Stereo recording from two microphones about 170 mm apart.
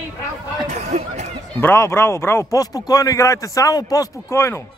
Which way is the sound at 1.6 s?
15° left (ahead or behind).